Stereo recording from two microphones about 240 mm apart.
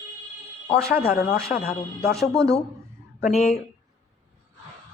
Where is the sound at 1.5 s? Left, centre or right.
Left.